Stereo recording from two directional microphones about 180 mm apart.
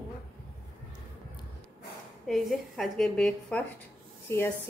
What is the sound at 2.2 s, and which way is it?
A woman's voice, centre (ahead or behind).